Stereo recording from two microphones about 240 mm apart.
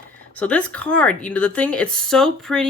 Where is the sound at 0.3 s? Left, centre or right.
Centre.